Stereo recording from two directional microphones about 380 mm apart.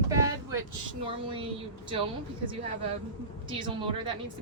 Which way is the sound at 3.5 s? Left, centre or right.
Centre.